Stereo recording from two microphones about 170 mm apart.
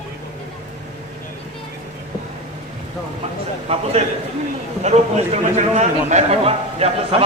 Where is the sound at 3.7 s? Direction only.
35° right (ahead or behind).